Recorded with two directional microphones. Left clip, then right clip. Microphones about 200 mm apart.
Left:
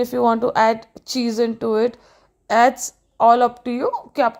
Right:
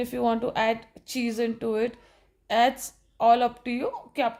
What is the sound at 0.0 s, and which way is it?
A woman's voice, 25° left (ahead or behind).